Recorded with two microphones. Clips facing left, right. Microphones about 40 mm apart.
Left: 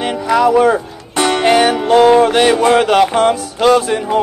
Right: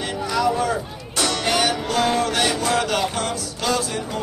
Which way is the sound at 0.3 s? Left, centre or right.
Left.